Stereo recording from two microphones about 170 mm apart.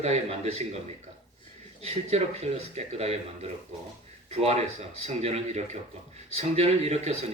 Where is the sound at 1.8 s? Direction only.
40° right (ahead or behind).